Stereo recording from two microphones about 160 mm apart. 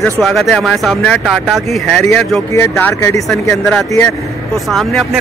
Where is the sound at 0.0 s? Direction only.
Centre (ahead or behind).